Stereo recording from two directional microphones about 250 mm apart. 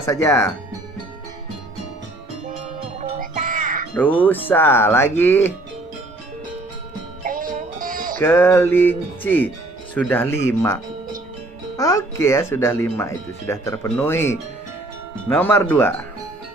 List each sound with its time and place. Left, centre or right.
0.0 s speech: centre
3.0 s music: right
3.9 s speech: centre
7.3 s music: right
8.2 s speech: centre
11.8 s speech: centre
15.4 s speech: centre